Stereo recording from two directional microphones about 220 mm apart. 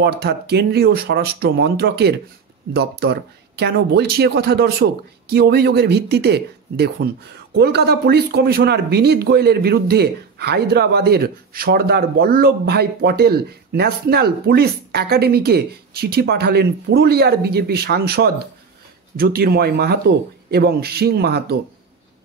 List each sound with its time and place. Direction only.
0.0 s speech: 45° right (ahead or behind)